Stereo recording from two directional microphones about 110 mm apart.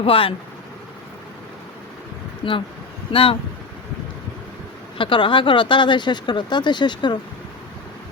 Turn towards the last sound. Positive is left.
turn(degrees=45)  # may be behind; listen again after turning